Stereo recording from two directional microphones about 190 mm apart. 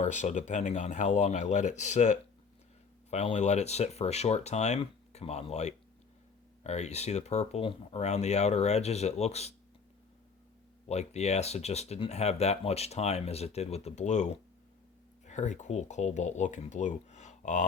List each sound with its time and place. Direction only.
0.0 s speech: 40° left (ahead or behind)
10.8 s speech: 35° left (ahead or behind)